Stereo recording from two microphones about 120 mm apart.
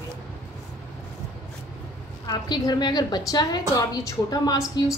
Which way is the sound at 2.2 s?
35° left (ahead or behind).